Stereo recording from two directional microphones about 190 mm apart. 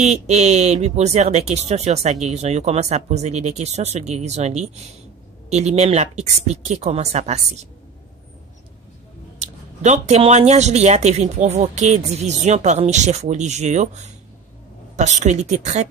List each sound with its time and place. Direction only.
0.0 s speech: 35° right (ahead or behind)
9.4 s speech: 35° right (ahead or behind)